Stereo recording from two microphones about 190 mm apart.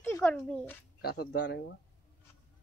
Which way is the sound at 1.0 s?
55° left (ahead or behind).